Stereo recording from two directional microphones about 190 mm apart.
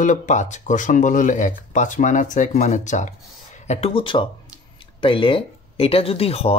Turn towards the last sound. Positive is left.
turn(degrees=30)  # may be behind; listen again after turning